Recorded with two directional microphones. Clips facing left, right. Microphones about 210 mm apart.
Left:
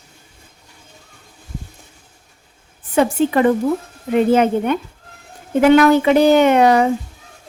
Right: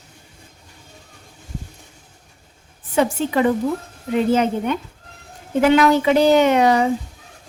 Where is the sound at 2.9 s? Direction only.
55° left (ahead or behind).